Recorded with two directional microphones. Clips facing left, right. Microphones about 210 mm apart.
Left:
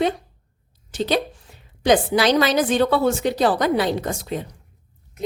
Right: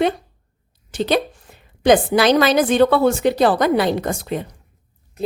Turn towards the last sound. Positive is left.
turn(degrees=-60)  # may be behind; listen again after turning